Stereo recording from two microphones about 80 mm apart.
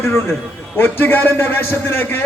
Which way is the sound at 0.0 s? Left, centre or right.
Left.